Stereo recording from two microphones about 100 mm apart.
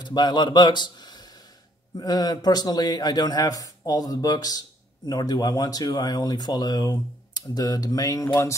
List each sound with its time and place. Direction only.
0.0 s a man's voice: 45° left (ahead or behind); by 8.5 s 30° left (ahead or behind)